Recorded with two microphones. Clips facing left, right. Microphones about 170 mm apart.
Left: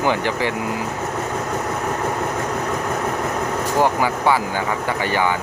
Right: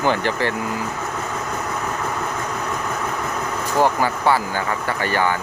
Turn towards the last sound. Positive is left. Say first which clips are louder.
# left 1 dB
turn(degrees=15)  # may be behind; listen again after turning